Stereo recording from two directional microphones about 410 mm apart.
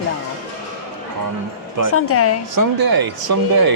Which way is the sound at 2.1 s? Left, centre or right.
Left.